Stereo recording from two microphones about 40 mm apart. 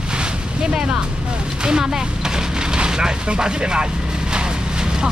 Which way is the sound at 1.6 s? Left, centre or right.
Centre.